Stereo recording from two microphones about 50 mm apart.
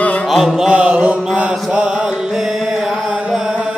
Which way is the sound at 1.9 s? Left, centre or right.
Centre.